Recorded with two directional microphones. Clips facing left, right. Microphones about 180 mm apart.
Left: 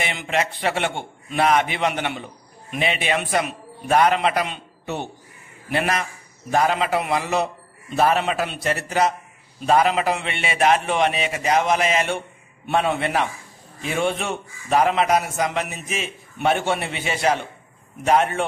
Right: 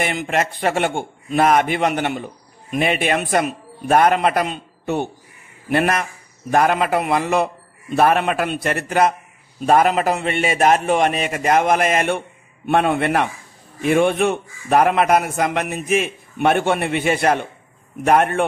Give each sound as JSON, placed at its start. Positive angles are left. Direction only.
{"t": 0.0, "sound": "a man's voice", "side_deg": -45}